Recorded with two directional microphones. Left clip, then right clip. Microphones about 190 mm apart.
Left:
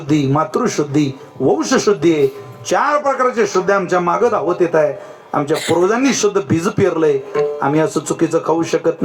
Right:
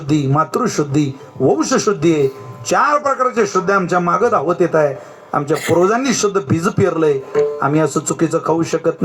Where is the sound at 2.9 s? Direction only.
35° right (ahead or behind).